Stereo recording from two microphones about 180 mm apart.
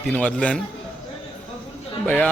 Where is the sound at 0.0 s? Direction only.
5° left (ahead or behind).